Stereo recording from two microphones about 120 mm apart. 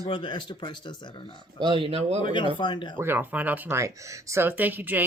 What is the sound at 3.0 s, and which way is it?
Speech, 15° right (ahead or behind).